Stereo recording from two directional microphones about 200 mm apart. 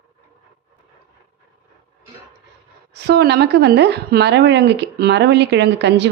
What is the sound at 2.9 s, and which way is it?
A woman's voice, 55° right (ahead or behind).